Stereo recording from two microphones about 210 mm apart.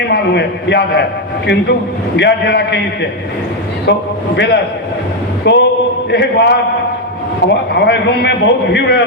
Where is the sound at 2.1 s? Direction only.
55° left (ahead or behind).